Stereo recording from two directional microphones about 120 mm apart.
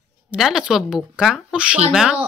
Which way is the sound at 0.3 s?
5° right (ahead or behind).